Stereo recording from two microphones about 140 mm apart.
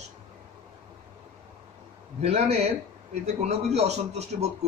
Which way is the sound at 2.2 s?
50° right (ahead or behind).